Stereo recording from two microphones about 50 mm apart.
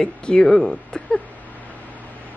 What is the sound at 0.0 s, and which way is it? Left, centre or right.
Speech, centre.